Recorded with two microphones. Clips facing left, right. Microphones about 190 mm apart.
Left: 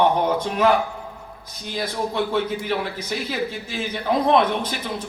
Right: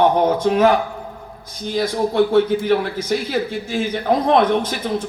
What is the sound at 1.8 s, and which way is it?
A man's voice, 45° right (ahead or behind).